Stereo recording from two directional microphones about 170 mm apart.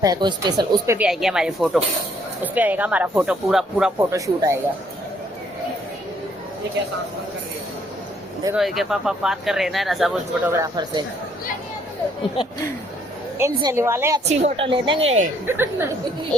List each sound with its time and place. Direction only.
0.0 s speech: 25° right (ahead or behind)
0.9 s speech: 5° right (ahead or behind)
4.1 s speech: 15° right (ahead or behind)
8.5 s speech: centre (ahead or behind)
10.5 s speech: 20° right (ahead or behind)
13.4 s speech: 20° right (ahead or behind)
14.3 s speech: 35° right (ahead or behind)
15.4 s speech: 15° right (ahead or behind)